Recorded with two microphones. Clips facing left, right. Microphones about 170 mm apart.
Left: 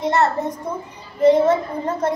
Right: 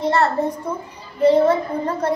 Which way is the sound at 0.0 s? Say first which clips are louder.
Right 1 dB; 20° left (ahead or behind).